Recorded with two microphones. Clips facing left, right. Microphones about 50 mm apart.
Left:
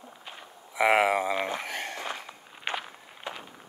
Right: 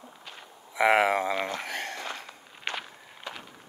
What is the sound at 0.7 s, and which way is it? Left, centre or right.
Speech, centre.